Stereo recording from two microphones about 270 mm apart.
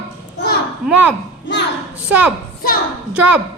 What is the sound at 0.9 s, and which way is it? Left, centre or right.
Speech, centre.